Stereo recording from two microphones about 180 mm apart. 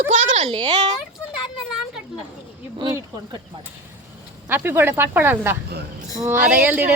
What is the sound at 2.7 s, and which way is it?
Speech, 25° right (ahead or behind).